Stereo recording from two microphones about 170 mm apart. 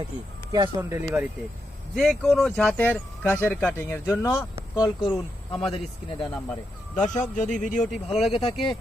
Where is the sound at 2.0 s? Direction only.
Centre (ahead or behind); by 4.4 s 15° left (ahead or behind).